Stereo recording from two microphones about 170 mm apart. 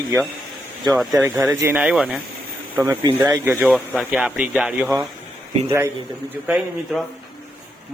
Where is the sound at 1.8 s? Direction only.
5° right (ahead or behind).